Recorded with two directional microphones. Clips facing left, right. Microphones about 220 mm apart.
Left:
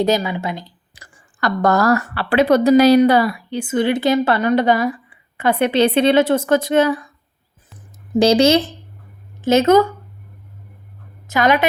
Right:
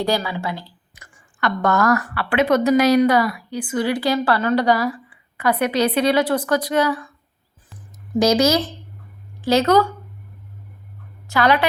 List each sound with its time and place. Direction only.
0.0 s a woman's voice: 20° left (ahead or behind)
0.9 s a woman's voice: 35° left (ahead or behind)
8.1 s a woman's voice: 30° left (ahead or behind)
11.3 s a woman's voice: 20° left (ahead or behind)